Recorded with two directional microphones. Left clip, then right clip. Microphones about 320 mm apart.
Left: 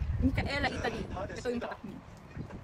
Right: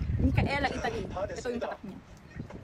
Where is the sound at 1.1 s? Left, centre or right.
Right.